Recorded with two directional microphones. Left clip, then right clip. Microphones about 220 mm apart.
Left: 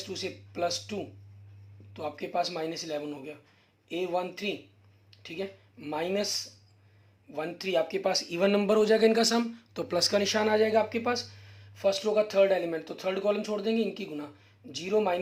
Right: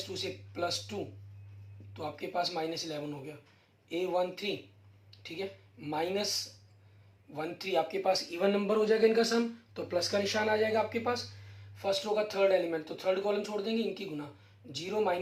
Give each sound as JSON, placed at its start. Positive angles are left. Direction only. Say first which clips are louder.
{"t": 0.1, "sound": "speech", "louder": "left 2 dB", "side_deg": 50}
{"t": 7.3, "sound": "speech", "louder": "left 3 dB", "side_deg": 50}